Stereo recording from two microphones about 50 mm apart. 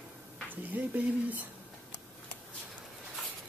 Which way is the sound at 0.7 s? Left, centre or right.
Right.